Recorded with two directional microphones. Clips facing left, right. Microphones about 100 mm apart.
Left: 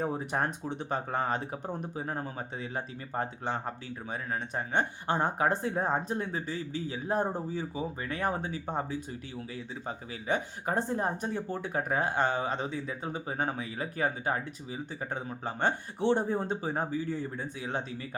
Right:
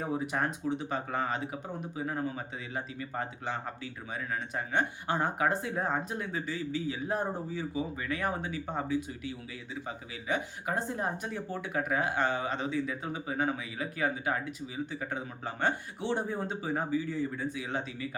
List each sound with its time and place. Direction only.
0.0 s speech: 40° left (ahead or behind)